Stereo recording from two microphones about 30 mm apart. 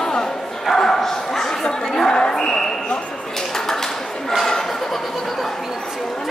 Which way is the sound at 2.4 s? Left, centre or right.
Centre.